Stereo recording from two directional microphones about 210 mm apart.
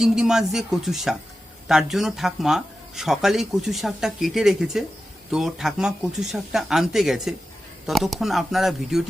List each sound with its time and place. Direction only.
0.0 s speech: centre (ahead or behind)